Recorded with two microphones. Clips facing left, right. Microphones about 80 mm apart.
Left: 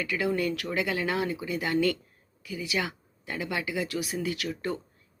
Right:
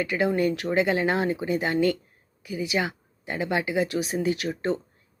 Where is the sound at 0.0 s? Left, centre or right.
Right.